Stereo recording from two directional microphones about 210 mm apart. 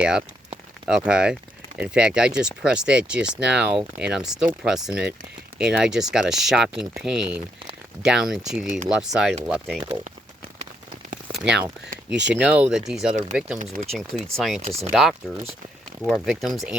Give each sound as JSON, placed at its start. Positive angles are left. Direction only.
{"t": 0.0, "sound": "speech", "side_deg": -5}
{"t": 11.4, "sound": "speech", "side_deg": -5}
{"t": 13.6, "sound": "speech", "side_deg": -35}
{"t": 14.3, "sound": "speech", "side_deg": 0}